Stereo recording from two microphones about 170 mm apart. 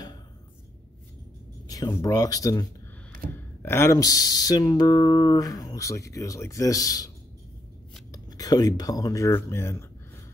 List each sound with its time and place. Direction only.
1.7 s speech: 20° left (ahead or behind)
8.1 s speech: 20° left (ahead or behind)